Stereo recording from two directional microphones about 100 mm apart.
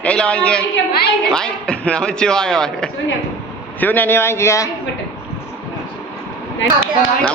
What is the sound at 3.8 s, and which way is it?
Speech, 20° left (ahead or behind).